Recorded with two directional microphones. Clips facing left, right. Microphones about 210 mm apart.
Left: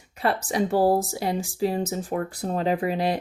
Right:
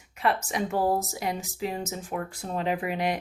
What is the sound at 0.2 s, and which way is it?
A woman's voice, 35° left (ahead or behind).